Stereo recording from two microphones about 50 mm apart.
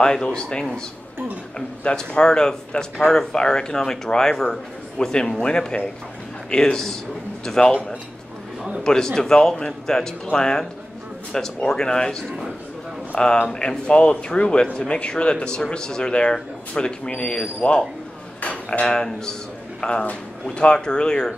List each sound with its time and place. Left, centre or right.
0.0 s speech: centre
2.0 s speech: centre
8.8 s speech: centre
13.2 s speech: centre
18.4 s dishes: left
19.8 s speech: left